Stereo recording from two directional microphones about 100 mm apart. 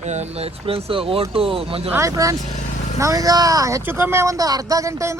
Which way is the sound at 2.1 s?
35° right (ahead or behind).